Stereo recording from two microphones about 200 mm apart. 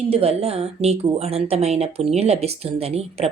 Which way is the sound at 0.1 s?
30° right (ahead or behind).